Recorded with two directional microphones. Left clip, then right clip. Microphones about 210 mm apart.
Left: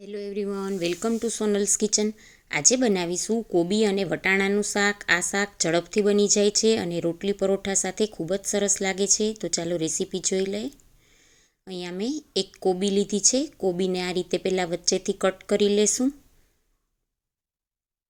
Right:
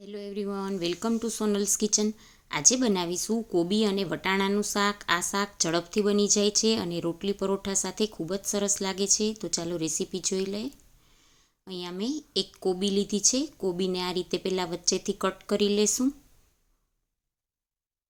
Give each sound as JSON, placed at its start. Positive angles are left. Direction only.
{"t": 0.0, "sound": "speech", "side_deg": 10}